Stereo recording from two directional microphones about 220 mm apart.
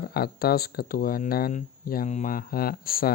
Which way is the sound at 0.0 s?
45° left (ahead or behind).